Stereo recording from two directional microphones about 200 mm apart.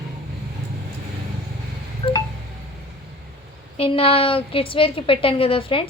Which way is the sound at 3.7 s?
25° left (ahead or behind).